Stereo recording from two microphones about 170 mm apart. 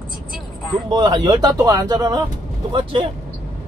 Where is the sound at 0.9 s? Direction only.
25° right (ahead or behind).